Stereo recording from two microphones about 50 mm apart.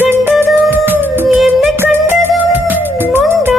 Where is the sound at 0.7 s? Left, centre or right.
Right.